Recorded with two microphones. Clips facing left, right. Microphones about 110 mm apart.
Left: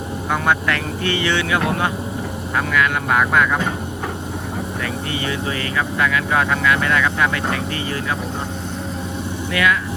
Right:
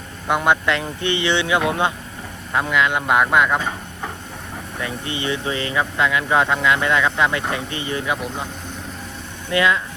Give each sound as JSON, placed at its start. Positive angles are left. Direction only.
{"t": 0.3, "sound": "speech", "side_deg": -20}
{"t": 4.8, "sound": "speech", "side_deg": -25}
{"t": 9.5, "sound": "speech", "side_deg": -25}